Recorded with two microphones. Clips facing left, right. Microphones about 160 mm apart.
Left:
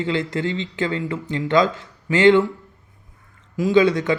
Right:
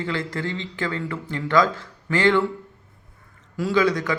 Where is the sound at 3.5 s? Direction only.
20° left (ahead or behind).